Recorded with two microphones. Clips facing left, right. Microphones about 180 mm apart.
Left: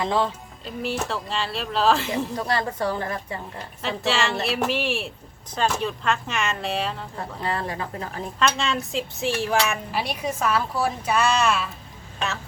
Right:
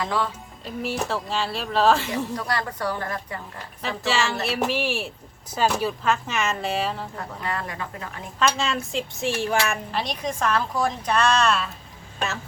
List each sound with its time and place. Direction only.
0.0 s a woman's voice: 25° left (ahead or behind)
0.6 s a woman's voice: centre (ahead or behind)
2.3 s a woman's voice: 25° left (ahead or behind)
3.8 s a woman's voice: centre (ahead or behind)
7.2 s speech: 30° left (ahead or behind)
8.4 s a woman's voice: centre (ahead or behind)